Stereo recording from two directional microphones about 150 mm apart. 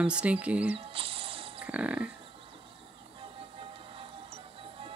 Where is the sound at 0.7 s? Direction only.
40° right (ahead or behind).